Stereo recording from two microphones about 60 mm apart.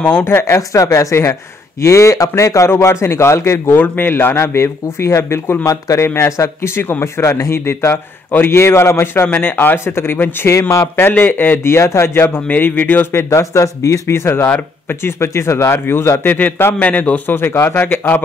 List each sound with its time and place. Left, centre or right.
0.2 s speech: left
0.6 s speech: left
2.7 s speech: left
3.7 s a man's voice: left
5.7 s speech: left
6.0 s speech: left
9.0 s a man's voice: left
9.8 s a man's voice: left
11.6 s speech: left
12.4 s a man's voice: left
13.1 s a man's voice: left
13.4 s speech: left
16.8 s a man's voice: left
17.4 s a man's voice: left